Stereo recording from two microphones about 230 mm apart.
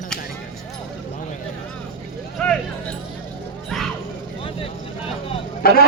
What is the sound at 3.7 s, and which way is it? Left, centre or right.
Music, centre.